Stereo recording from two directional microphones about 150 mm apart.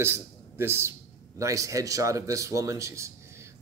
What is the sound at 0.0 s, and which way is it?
A man's voice, 15° right (ahead or behind).